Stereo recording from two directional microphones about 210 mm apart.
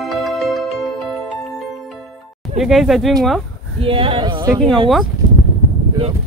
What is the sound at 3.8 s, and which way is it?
Speech, 25° right (ahead or behind).